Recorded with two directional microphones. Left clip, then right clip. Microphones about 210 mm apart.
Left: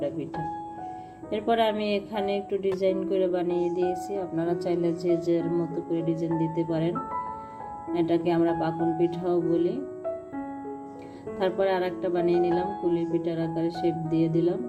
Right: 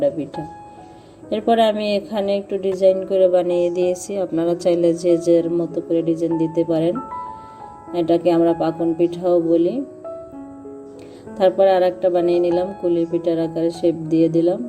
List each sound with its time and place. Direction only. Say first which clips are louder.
1.3 s speech: right 8 dB; 20° right (ahead or behind)
7.9 s speech: right 8 dB; 20° right (ahead or behind)
11.3 s speech: right 11 dB; 20° right (ahead or behind)